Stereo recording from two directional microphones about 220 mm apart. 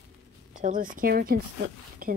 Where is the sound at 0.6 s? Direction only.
35° right (ahead or behind).